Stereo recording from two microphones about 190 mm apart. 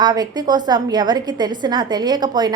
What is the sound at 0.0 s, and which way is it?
A woman's voice, 20° right (ahead or behind).